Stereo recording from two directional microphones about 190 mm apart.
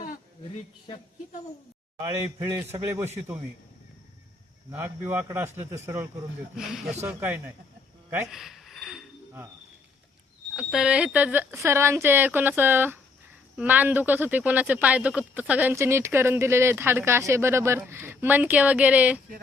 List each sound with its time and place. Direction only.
2.4 s speech: 15° right (ahead or behind)
4.7 s speech: 10° right (ahead or behind)
6.6 s speech: centre (ahead or behind)
8.3 s a sound: centre (ahead or behind)
10.5 s speech: 5° right (ahead or behind)